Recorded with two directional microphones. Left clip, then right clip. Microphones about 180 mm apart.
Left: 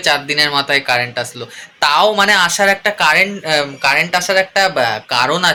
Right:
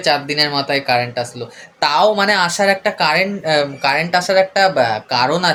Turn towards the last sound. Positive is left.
turn(degrees=-5)  # may be behind; listen again after turning